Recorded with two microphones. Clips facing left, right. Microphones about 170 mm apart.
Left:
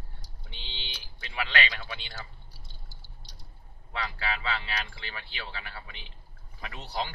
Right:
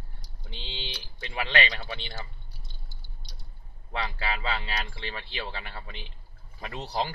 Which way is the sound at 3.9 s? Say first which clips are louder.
Right 2 dB; 35° right (ahead or behind).